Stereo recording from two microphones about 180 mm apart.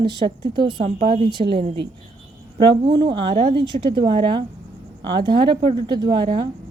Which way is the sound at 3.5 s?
25° right (ahead or behind).